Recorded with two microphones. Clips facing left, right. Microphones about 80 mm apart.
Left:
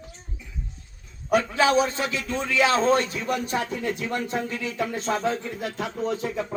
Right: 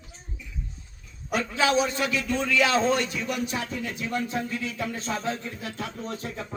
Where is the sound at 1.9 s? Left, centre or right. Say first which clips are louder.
Right 1 dB; left.